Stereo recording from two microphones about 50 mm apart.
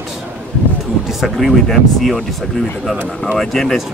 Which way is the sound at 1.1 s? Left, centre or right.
Centre.